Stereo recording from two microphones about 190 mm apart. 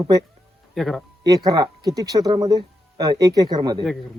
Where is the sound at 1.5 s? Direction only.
20° right (ahead or behind).